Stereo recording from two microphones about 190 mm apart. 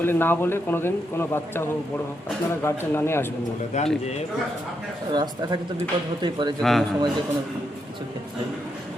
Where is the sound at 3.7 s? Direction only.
35° left (ahead or behind).